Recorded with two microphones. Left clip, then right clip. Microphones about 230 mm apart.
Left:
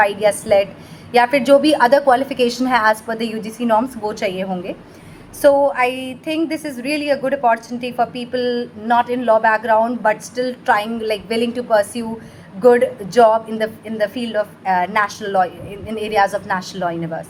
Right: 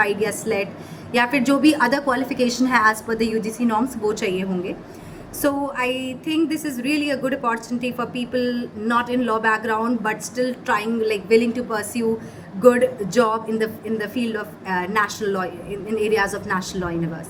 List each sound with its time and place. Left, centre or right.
0.0 s a woman's voice: centre